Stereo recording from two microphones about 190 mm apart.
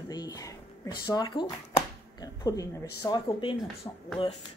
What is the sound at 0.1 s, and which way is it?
Speech, 20° left (ahead or behind).